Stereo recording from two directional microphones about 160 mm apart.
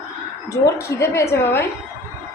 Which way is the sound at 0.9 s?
20° left (ahead or behind).